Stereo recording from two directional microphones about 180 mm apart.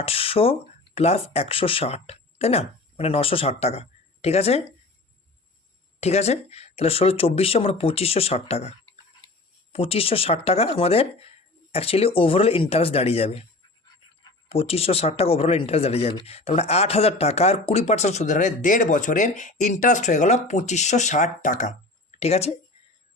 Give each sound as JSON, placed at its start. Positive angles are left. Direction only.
{"t": 0.0, "sound": "speech", "side_deg": 30}
{"t": 6.0, "sound": "speech", "side_deg": 35}
{"t": 9.7, "sound": "speech", "side_deg": 35}
{"t": 14.5, "sound": "speech", "side_deg": 35}